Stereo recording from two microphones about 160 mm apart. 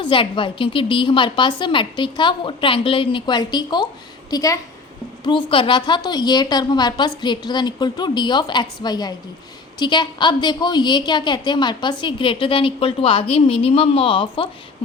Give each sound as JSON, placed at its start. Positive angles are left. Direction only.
{"t": 0.0, "sound": "a woman's voice", "side_deg": 30}